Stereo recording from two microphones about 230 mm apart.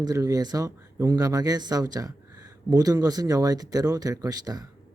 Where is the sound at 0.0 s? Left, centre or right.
Centre.